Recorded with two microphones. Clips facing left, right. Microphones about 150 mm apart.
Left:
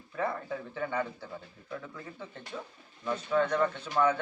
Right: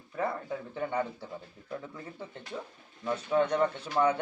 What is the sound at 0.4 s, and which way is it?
Speech, 20° right (ahead or behind).